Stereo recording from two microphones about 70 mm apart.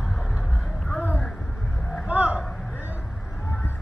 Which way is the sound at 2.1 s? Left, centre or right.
Right.